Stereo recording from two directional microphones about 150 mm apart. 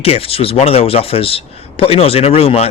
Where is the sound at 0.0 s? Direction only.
40° left (ahead or behind).